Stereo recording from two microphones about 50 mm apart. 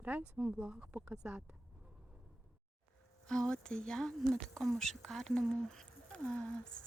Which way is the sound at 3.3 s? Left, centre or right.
Centre.